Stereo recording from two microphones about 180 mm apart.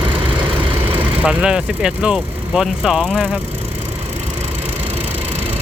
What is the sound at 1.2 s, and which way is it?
Speech, 5° right (ahead or behind).